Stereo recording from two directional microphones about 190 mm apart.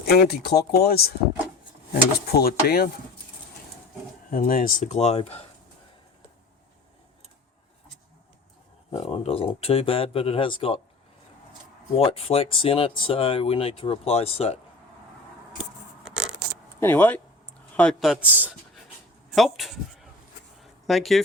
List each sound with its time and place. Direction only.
0.1 s speech: 55° left (ahead or behind)
4.3 s speech: 45° left (ahead or behind)
8.9 s speech: 30° left (ahead or behind)
11.9 s speech: 30° left (ahead or behind)
16.8 s speech: 10° left (ahead or behind)
20.6 s a sound: centre (ahead or behind)